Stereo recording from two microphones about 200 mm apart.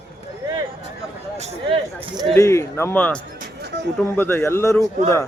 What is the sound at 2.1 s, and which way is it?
Speech, 20° right (ahead or behind).